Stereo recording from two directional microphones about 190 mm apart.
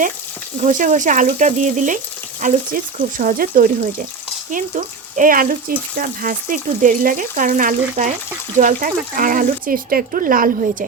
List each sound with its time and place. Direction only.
0.6 s speech: 40° right (ahead or behind)